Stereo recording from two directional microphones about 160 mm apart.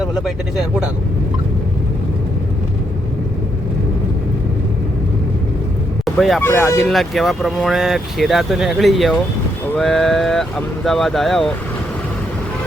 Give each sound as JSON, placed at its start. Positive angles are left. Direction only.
{"t": 6.1, "sound": "speech", "side_deg": 0}
{"t": 6.4, "sound": "speech", "side_deg": 15}
{"t": 6.7, "sound": "speech", "side_deg": 0}